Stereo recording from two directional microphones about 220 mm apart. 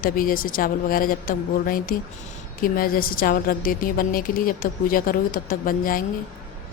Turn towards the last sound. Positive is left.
turn(degrees=40)  # may be behind; listen again after turning